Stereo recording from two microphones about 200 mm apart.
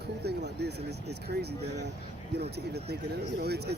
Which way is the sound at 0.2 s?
55° right (ahead or behind).